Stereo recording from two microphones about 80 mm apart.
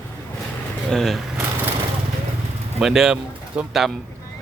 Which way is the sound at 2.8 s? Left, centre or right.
Centre.